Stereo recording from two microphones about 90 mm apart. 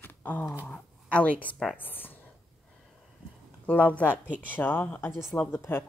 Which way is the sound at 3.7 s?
15° left (ahead or behind).